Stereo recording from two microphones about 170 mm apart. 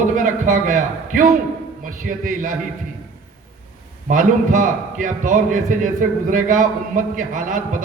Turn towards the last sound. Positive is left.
turn(degrees=-50)  # may be behind; listen again after turning